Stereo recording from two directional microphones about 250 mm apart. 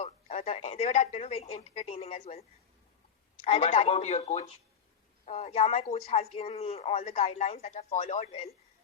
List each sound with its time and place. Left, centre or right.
0.0 s speech: left
3.4 s a man's voice: left